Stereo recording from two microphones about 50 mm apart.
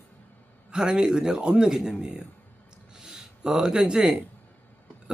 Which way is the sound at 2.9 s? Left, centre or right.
Centre.